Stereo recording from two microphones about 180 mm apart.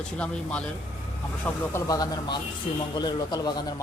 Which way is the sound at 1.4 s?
15° left (ahead or behind).